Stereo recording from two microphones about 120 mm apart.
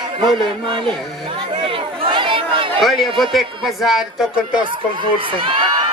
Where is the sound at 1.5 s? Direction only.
45° right (ahead or behind).